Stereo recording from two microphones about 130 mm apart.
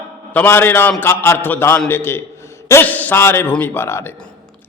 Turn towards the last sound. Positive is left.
turn(degrees=20)  # may be behind; listen again after turning